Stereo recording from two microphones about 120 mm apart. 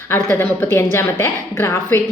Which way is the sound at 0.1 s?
20° left (ahead or behind).